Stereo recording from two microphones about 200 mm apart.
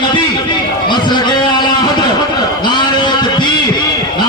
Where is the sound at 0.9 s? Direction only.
20° left (ahead or behind).